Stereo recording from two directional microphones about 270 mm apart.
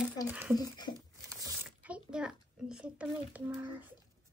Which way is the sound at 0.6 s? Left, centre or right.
Centre.